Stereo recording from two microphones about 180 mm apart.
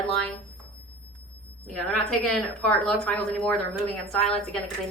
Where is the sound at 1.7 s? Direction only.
Centre (ahead or behind).